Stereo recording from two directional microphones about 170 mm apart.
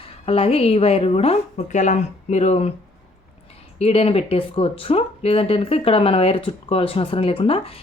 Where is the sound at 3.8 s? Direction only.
35° left (ahead or behind).